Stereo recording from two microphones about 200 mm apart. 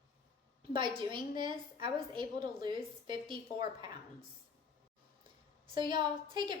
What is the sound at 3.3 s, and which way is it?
Speech, 20° right (ahead or behind).